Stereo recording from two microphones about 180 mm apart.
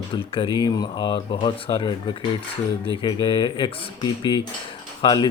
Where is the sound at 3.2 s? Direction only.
25° left (ahead or behind).